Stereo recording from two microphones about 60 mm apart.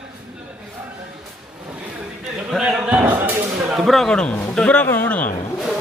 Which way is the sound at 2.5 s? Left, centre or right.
Centre.